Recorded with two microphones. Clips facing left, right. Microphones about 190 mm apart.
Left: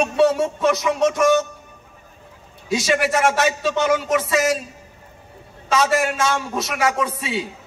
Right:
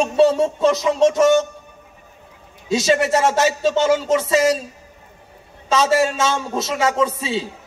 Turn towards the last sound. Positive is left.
turn(degrees=-25)  # may be behind; listen again after turning